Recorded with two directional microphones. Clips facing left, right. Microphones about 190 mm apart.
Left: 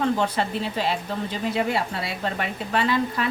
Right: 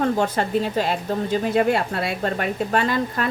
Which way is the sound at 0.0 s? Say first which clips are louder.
Right 2 dB; 45° right (ahead or behind).